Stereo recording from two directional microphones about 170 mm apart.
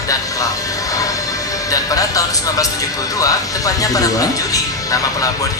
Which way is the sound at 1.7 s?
20° left (ahead or behind).